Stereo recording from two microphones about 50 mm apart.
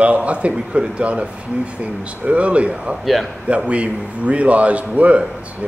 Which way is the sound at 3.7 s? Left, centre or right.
Right.